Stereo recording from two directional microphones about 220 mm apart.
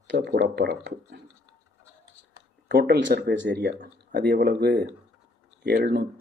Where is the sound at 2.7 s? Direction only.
45° right (ahead or behind).